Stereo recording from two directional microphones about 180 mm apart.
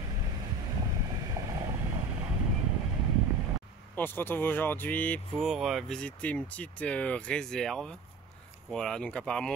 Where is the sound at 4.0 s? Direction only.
10° left (ahead or behind).